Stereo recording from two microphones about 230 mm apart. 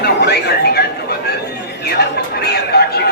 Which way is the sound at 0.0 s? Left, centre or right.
Left.